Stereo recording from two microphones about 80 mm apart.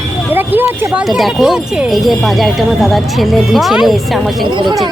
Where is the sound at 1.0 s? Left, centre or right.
Centre.